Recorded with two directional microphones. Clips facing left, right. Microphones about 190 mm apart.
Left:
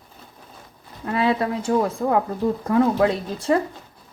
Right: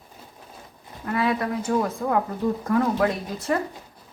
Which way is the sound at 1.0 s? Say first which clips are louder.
Left 3 dB; 25° left (ahead or behind).